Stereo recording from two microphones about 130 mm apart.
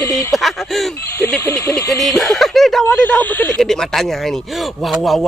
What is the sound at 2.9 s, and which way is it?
Speech, 15° left (ahead or behind).